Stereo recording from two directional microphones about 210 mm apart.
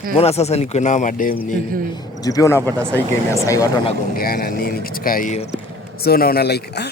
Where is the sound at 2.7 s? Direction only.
10° right (ahead or behind).